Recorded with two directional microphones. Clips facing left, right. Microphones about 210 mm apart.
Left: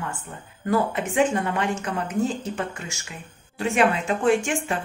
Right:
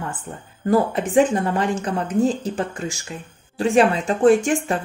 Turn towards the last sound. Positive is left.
turn(degrees=-40)  # may be behind; listen again after turning